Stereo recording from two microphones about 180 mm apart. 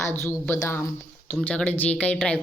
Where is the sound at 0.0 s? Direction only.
15° left (ahead or behind).